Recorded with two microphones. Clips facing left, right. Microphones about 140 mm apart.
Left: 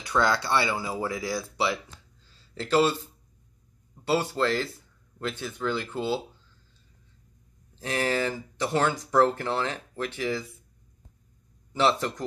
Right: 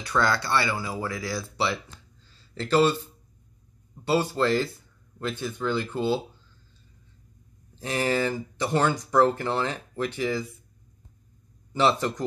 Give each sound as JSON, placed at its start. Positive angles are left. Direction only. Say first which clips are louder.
{"t": 0.2, "sound": "speech", "louder": "even", "side_deg": 15}
{"t": 2.5, "sound": "speech", "louder": "right 2 dB", "side_deg": 5}
{"t": 7.8, "sound": "speech", "louder": "right 2 dB", "side_deg": 0}
{"t": 11.7, "sound": "speech", "louder": "right 1 dB", "side_deg": 0}